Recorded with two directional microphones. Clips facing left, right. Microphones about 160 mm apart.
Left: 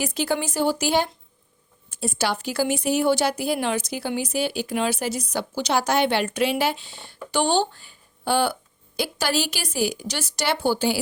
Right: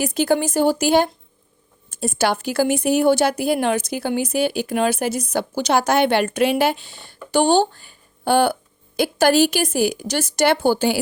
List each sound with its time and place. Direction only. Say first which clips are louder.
0.0 s speech: right 6 dB; 50° right (ahead or behind)